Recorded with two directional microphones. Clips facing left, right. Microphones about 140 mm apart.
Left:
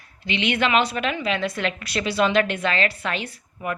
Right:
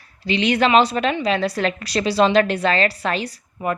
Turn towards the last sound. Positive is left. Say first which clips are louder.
# right 5 dB
turn(degrees=-35)  # may be behind; listen again after turning